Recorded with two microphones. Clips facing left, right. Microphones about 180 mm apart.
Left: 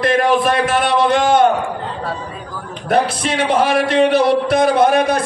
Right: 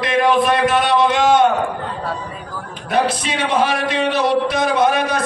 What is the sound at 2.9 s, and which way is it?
Speech, 55° left (ahead or behind).